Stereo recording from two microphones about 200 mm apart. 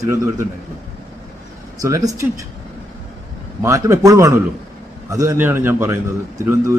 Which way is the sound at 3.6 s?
15° right (ahead or behind).